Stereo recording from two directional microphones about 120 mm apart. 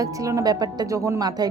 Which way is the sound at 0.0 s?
25° right (ahead or behind).